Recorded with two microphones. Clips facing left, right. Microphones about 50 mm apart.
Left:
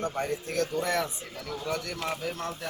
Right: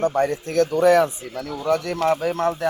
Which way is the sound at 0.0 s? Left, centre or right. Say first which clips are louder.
Right 10 dB; right.